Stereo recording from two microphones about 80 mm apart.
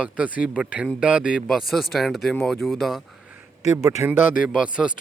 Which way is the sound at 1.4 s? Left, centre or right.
Centre.